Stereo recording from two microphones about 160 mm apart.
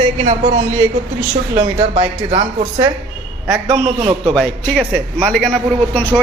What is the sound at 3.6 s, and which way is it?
Speech, 40° right (ahead or behind).